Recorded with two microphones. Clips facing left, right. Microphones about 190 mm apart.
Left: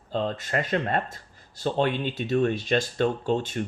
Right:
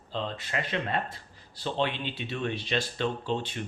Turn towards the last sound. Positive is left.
turn(degrees=45)  # may be behind; listen again after turning